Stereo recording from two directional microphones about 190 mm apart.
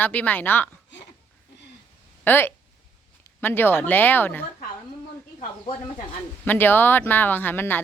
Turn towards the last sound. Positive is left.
turn(degrees=10)  # may be behind; listen again after turning